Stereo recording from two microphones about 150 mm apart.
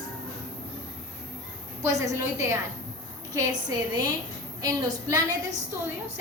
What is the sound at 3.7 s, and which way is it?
A woman's voice, 25° right (ahead or behind).